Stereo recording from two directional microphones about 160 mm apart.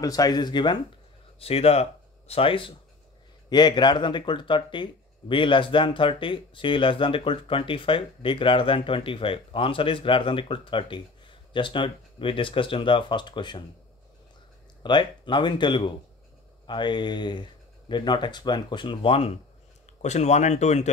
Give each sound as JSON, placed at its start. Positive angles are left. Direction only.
{"t": 0.0, "sound": "speech", "side_deg": 20}
{"t": 1.4, "sound": "speech", "side_deg": 40}
{"t": 14.8, "sound": "speech", "side_deg": 30}